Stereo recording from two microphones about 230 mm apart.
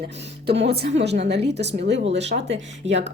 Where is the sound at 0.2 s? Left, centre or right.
Right.